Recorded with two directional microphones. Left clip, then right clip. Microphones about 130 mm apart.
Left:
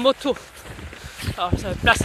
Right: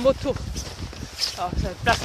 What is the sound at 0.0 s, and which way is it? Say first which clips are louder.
Speech: left 2 dB; 50° left (ahead or behind).